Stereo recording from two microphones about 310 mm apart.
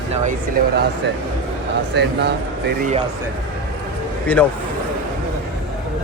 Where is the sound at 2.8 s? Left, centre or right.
Right.